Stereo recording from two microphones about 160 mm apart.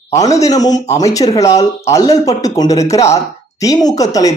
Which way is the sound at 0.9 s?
20° left (ahead or behind).